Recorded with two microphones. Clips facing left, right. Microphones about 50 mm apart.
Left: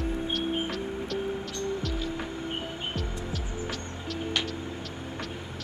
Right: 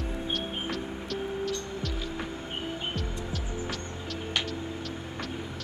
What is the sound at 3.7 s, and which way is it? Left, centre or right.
Music, centre.